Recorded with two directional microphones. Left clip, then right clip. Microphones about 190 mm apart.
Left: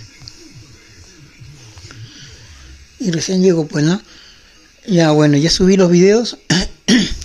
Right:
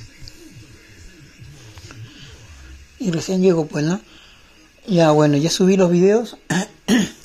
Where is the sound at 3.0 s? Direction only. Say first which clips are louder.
Left 3 dB; 15° left (ahead or behind); by 7.2 s 35° left (ahead or behind).